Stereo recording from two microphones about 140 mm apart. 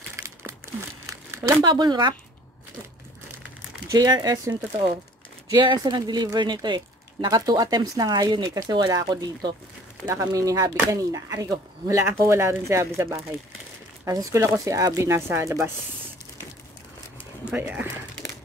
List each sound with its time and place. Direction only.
1.6 s speech: 30° right (ahead or behind)
3.9 s speech: 30° right (ahead or behind)
17.5 s speech: 10° right (ahead or behind)